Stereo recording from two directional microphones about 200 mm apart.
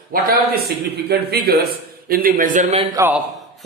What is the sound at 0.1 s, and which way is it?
A man's voice, 45° right (ahead or behind).